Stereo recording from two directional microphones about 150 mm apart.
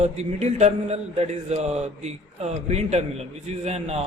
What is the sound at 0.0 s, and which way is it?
Mantra, 45° right (ahead or behind).